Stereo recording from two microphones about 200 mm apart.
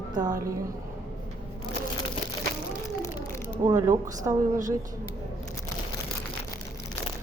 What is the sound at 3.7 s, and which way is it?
Speech, 15° right (ahead or behind).